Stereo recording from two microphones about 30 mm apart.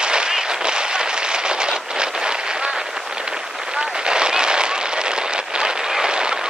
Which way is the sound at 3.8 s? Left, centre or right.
Right.